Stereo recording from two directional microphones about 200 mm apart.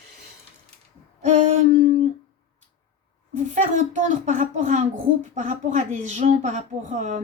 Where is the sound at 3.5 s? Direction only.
40° right (ahead or behind).